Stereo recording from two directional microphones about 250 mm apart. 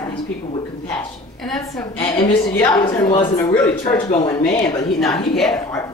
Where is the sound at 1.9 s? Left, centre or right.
Centre.